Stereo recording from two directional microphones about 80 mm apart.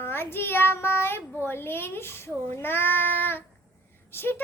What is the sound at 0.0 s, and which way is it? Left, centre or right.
A child's voice, left.